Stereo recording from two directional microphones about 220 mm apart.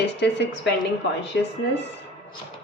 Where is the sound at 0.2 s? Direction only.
50° left (ahead or behind).